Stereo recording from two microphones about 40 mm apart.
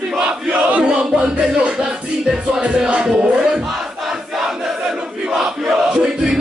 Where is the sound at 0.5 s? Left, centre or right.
Right.